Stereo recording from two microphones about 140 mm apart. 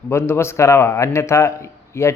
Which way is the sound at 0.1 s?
20° left (ahead or behind).